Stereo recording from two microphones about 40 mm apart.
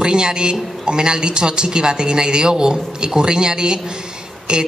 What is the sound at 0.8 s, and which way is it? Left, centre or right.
A woman's voice, centre.